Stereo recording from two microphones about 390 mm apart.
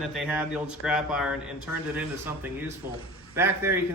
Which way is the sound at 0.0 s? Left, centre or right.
Centre.